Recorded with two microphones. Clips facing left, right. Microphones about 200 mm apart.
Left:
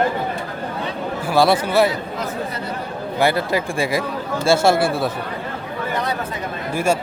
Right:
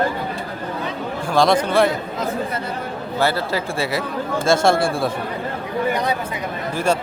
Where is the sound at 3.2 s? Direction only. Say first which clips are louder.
Left 2 dB; 15° left (ahead or behind).